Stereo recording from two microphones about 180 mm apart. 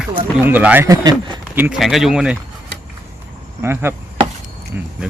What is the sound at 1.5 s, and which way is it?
Speech, 10° right (ahead or behind).